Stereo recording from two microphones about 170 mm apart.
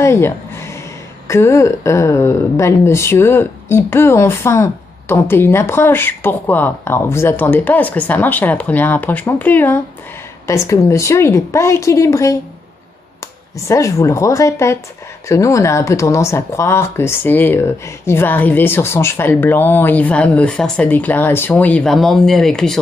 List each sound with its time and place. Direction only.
0.0 s a sound: 15° left (ahead or behind)
1.2 s a woman's voice: 15° left (ahead or behind)
13.7 s a woman's voice: 20° left (ahead or behind)